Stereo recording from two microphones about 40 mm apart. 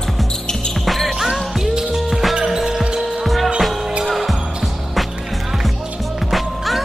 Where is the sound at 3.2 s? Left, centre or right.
Centre.